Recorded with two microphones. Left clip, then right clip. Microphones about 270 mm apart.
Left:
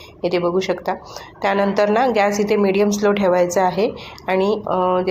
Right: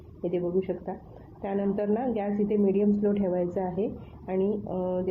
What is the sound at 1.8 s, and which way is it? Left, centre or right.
Speech, centre.